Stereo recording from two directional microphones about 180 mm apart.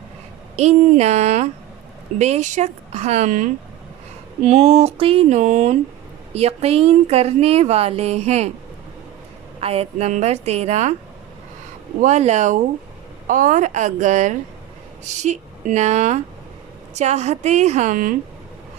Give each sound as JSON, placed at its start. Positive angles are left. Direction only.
{"t": 0.5, "sound": "a woman's voice", "side_deg": -40}
{"t": 9.6, "sound": "a woman's voice", "side_deg": -35}
{"t": 11.9, "sound": "a woman's voice", "side_deg": -40}